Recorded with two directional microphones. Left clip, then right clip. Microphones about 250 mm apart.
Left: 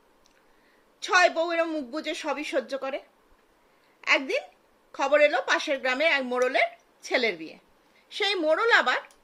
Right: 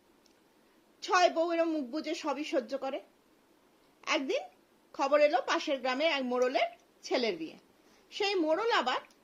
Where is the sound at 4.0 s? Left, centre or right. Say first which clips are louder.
Left 7 dB; centre.